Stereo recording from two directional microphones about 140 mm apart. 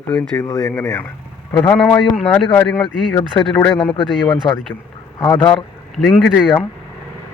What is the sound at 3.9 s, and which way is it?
Speech, 35° left (ahead or behind).